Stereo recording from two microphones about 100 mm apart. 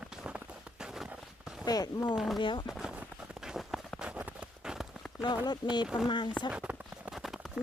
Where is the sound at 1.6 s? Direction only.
40° left (ahead or behind).